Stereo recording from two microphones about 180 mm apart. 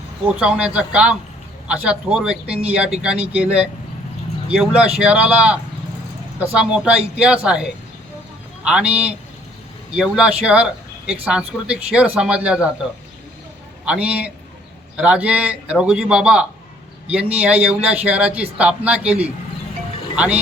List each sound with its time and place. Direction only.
0.3 s a man's voice: 5° right (ahead or behind)
13.8 s a man's voice: 5° right (ahead or behind)